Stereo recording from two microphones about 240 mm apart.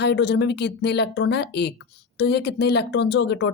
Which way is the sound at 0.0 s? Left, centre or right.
Left.